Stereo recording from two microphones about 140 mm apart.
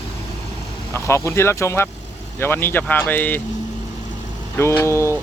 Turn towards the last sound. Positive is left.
turn(degrees=20)  # may be behind; listen again after turning